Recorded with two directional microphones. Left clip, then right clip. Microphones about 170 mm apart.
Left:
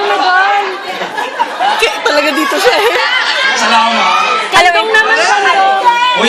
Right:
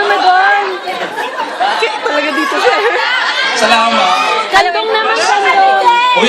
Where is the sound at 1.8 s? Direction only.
25° left (ahead or behind).